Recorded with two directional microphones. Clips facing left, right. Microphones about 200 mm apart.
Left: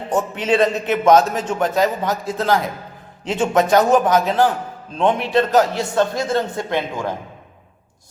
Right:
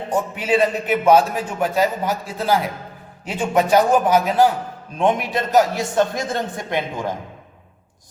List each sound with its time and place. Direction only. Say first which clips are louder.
0.3 s a man's voice: left 1 dB; 10° right (ahead or behind)